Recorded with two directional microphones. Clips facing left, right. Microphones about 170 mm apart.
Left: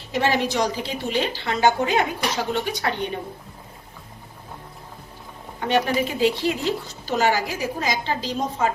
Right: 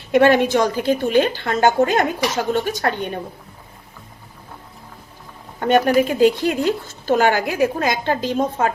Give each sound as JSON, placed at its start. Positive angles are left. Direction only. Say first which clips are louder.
{"t": 0.1, "sound": "speech", "louder": "right 8 dB", "side_deg": -55}
{"t": 5.5, "sound": "speech", "louder": "right 6 dB", "side_deg": -50}